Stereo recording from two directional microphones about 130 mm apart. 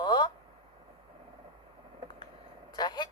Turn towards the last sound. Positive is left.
turn(degrees=35)  # may be behind; listen again after turning